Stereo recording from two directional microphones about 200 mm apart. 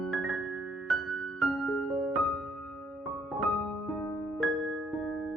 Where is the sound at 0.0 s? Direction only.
Centre (ahead or behind).